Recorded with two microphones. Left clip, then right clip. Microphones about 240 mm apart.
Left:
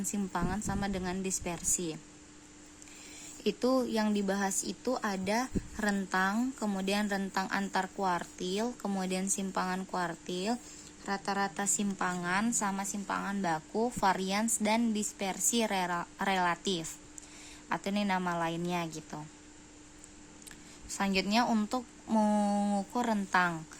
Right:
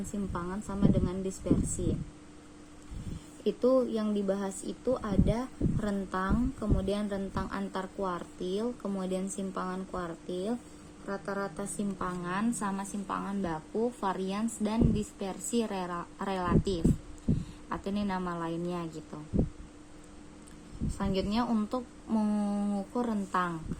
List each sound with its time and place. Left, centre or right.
0.3 s speech: left
3.4 s speech: left
11.0 s speech: left
11.5 s speech: left
21.0 s speech: left